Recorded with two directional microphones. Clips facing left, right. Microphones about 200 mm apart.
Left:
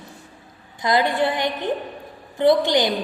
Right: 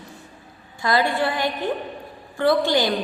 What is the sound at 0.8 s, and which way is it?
A woman's voice, 20° left (ahead or behind).